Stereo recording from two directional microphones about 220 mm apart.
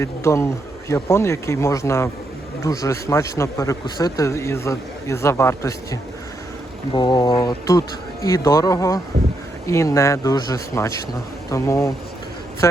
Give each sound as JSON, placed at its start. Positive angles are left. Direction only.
{"t": 0.0, "sound": "speech", "side_deg": 15}